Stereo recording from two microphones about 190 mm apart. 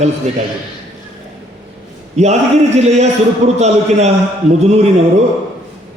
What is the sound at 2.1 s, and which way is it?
Speech, 35° right (ahead or behind).